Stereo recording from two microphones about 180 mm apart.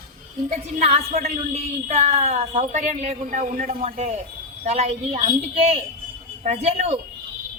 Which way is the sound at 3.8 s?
35° right (ahead or behind).